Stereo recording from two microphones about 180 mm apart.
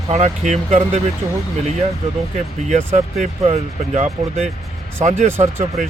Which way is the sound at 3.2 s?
40° right (ahead or behind).